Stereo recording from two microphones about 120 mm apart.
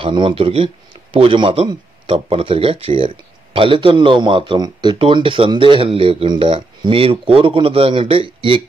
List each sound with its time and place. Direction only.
0.0 s speech: 45° right (ahead or behind)